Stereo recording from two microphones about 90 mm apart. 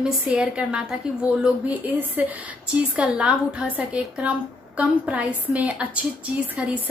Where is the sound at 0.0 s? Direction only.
10° right (ahead or behind).